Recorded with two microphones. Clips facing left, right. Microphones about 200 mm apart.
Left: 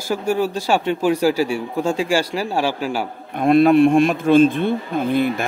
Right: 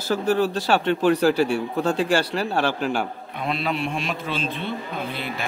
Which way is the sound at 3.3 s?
50° left (ahead or behind).